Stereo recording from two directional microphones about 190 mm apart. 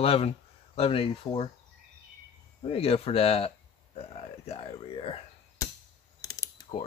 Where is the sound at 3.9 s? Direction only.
30° left (ahead or behind).